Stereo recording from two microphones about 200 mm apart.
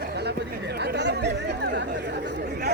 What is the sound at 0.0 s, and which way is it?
Chatter, 55° right (ahead or behind).